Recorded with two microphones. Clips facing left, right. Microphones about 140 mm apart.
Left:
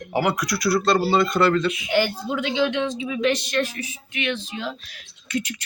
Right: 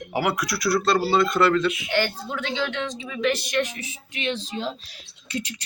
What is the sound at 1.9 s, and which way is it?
Speech, 15° left (ahead or behind).